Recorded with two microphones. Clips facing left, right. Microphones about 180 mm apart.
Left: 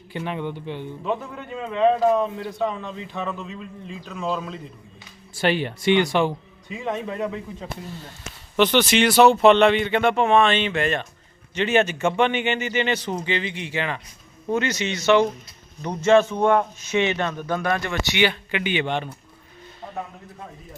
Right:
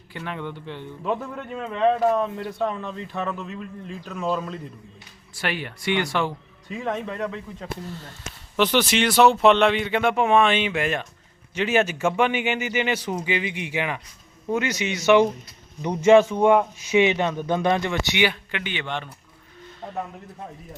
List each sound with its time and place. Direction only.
0.1 s speech: 20° left (ahead or behind)
2.1 s a man's voice: 5° right (ahead or behind)
5.3 s speech: 25° left (ahead or behind)
6.7 s a man's voice: centre (ahead or behind)
8.5 s a man's voice: 5° right (ahead or behind)
18.5 s speech: 15° left (ahead or behind)